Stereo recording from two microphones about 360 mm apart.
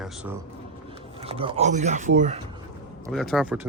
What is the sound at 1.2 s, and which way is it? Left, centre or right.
Speech, centre.